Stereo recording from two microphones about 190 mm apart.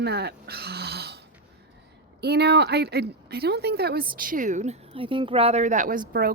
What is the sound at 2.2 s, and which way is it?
A woman's voice, 60° right (ahead or behind).